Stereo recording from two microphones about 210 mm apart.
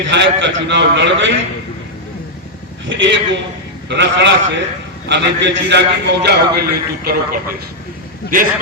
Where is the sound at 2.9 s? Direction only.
60° right (ahead or behind).